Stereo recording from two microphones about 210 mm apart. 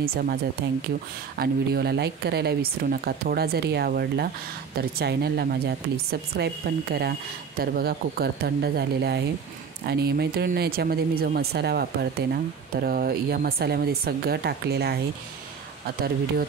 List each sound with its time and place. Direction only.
0.0 s speech: 45° right (ahead or behind)